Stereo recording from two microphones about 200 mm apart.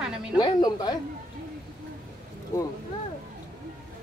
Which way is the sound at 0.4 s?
20° left (ahead or behind).